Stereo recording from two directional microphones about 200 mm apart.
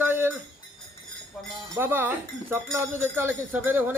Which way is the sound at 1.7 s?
10° right (ahead or behind).